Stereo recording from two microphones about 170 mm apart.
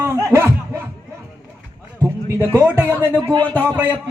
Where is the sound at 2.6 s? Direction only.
10° right (ahead or behind).